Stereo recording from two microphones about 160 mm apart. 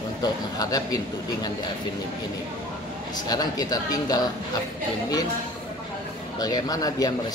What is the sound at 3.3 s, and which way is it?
Speech, 25° left (ahead or behind).